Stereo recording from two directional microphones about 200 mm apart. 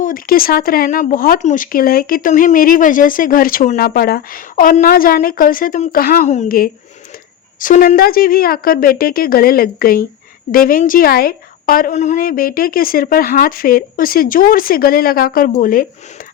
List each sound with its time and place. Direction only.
0.0 s speech: 45° left (ahead or behind)